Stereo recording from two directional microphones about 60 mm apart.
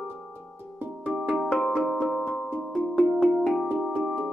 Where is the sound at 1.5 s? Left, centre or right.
Centre.